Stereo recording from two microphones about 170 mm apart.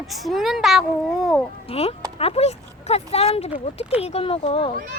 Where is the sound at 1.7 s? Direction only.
35° left (ahead or behind).